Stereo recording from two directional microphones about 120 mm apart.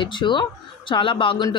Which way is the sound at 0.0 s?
40° left (ahead or behind).